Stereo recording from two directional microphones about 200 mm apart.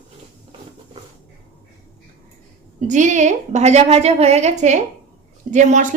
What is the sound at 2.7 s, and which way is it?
Speech, 40° right (ahead or behind).